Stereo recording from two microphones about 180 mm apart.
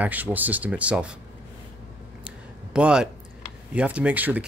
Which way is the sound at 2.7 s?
5° right (ahead or behind).